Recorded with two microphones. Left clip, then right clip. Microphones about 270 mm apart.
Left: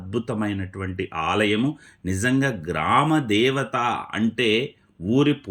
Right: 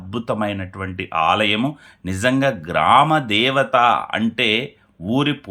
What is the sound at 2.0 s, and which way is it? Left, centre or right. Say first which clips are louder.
Speech: right 5 dB; right.